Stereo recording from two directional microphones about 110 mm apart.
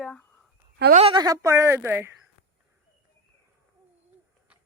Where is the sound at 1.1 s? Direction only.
35° right (ahead or behind).